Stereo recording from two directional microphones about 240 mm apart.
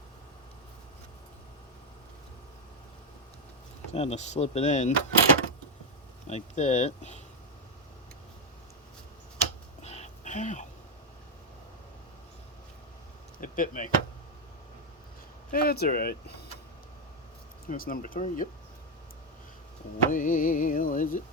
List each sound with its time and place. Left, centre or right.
3.9 s speech: left
6.2 s speech: left
9.8 s a sound: left
13.4 s speech: left
15.5 s music: left
17.7 s music: left
20.1 s music: left